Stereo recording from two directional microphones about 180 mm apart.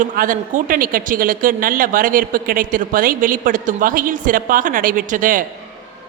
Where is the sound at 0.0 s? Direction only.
45° right (ahead or behind).